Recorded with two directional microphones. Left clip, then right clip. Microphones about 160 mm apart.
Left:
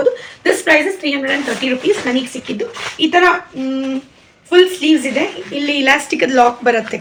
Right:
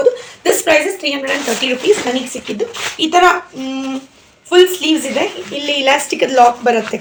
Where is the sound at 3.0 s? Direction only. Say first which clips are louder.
Right 1 dB; 5° left (ahead or behind).